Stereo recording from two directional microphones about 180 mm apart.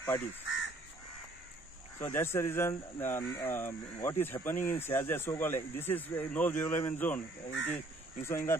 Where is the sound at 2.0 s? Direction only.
15° left (ahead or behind).